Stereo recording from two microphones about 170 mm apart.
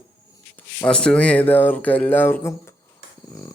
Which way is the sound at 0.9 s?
5° left (ahead or behind).